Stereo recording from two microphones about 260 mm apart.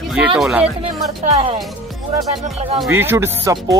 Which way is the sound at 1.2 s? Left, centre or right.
Right.